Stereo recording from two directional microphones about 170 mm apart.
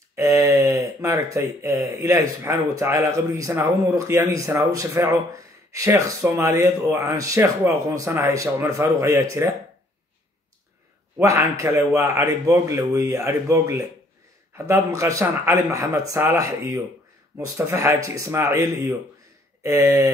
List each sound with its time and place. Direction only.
0.1 s speech: 15° right (ahead or behind)
11.1 s a man's voice: 15° right (ahead or behind)